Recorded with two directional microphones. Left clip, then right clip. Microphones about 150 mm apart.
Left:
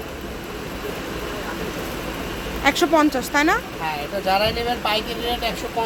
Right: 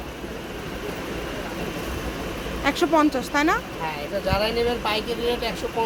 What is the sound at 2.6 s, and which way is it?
Speech, 10° left (ahead or behind).